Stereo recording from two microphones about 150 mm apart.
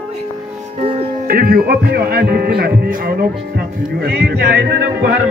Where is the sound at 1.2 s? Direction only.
75° right (ahead or behind).